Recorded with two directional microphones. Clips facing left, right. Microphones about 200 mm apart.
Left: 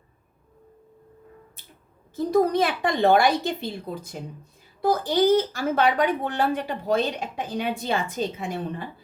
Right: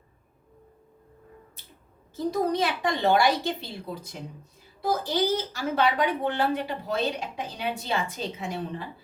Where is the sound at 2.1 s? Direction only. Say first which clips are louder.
Left 5 dB; 55° left (ahead or behind).